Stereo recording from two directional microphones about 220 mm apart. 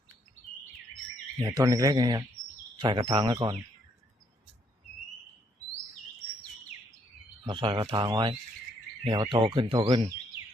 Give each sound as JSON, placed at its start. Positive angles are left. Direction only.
{"t": 1.4, "sound": "a man's voice", "side_deg": -15}
{"t": 7.4, "sound": "speech", "side_deg": -20}